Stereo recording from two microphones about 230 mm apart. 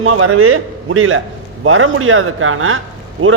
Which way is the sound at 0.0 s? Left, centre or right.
Right.